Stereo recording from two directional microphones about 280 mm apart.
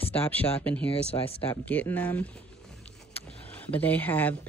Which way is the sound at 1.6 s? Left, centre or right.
Centre.